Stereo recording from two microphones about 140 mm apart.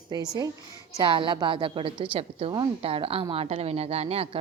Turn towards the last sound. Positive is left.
turn(degrees=-45)  # may be behind; listen again after turning